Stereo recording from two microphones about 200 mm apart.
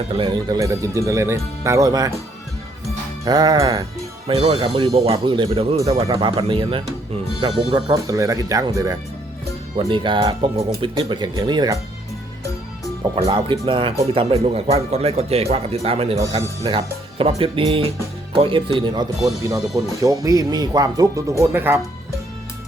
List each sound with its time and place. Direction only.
0.1 s speech: 25° right (ahead or behind)
3.2 s speech: 20° right (ahead or behind)
13.0 s speech: 25° right (ahead or behind)